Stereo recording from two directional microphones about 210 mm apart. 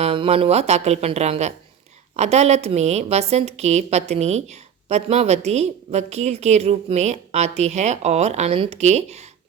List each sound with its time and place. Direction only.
0.0 s a woman's voice: 30° right (ahead or behind)